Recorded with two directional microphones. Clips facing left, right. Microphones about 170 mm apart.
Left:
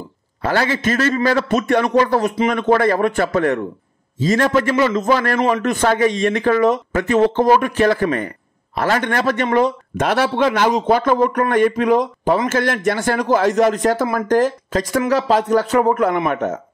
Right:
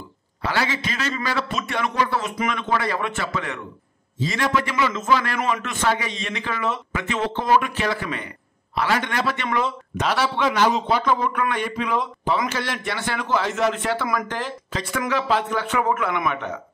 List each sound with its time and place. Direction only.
0.4 s speech: 50° left (ahead or behind)